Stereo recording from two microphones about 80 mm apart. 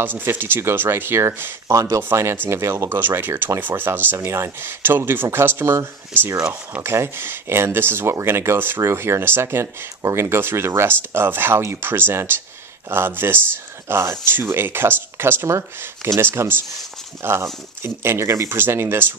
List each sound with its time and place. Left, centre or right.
0.0 s speech: right
2.1 s speech: right